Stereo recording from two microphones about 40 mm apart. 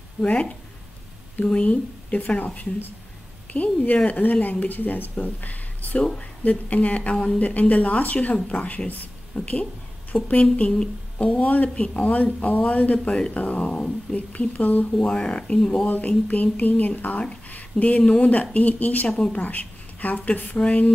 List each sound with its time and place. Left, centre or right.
0.2 s a woman's voice: left
6.4 s speech: left
7.4 s speech: left
10.1 s a woman's voice: centre
11.1 s speech: left
13.6 s speech: left
15.0 s speech: left
15.9 s speech: left